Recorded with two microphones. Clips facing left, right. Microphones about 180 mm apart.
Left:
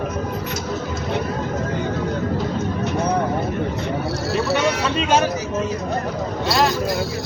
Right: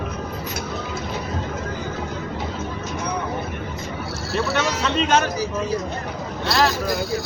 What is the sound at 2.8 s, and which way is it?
Vehicle, 65° left (ahead or behind).